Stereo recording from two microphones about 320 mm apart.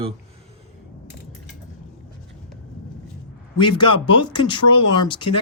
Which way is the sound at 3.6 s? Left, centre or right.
Centre.